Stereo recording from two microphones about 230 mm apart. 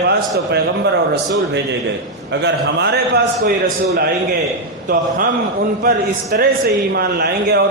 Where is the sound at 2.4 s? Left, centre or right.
Right.